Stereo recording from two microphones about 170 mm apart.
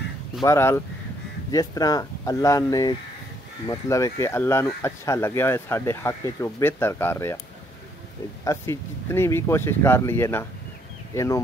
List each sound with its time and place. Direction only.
0.4 s speech: 15° left (ahead or behind)
8.5 s speech: 15° left (ahead or behind)